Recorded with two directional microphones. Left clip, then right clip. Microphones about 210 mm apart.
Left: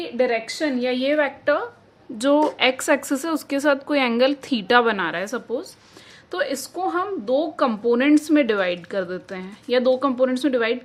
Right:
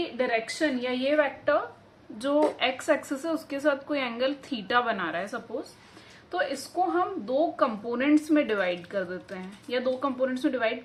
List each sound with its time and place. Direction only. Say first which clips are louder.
0.2 s a woman's voice: left 6 dB; 40° left (ahead or behind)